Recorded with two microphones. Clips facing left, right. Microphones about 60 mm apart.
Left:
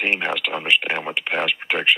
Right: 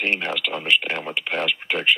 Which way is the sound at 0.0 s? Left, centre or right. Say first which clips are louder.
Left 2 dB; centre.